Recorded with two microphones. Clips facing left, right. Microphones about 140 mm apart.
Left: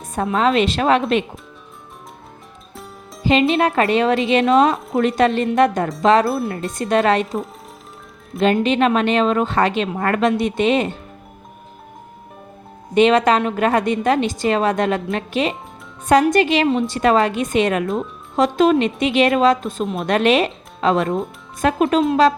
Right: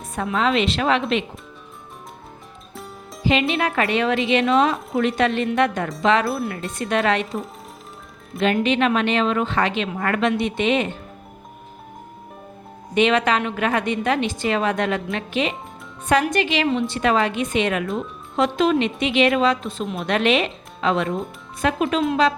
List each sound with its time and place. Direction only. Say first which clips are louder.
0.2 s a woman's voice: left 4 dB; 40° left (ahead or behind)
3.5 s a woman's voice: left 5 dB; 30° left (ahead or behind)
6.2 s speech: left 3 dB; centre (ahead or behind)
6.7 s a woman's voice: left 4 dB; 35° left (ahead or behind)
8.4 s a woman's voice: left 3 dB; 35° left (ahead or behind)
12.9 s a woman's voice: left 5 dB; 40° left (ahead or behind)
17.8 s speech: left 4 dB; centre (ahead or behind)
18.3 s a woman's voice: left 4 dB; 40° left (ahead or behind)